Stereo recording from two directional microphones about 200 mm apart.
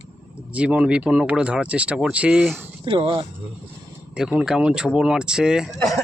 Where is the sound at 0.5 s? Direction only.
5° right (ahead or behind).